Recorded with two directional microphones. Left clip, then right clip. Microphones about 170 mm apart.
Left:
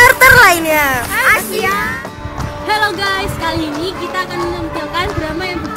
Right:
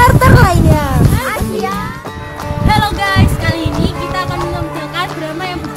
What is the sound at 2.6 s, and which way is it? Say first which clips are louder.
Music: right 1 dB; 5° right (ahead or behind).